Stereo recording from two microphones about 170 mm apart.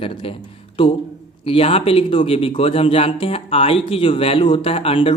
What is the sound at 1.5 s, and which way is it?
Speech, 35° left (ahead or behind).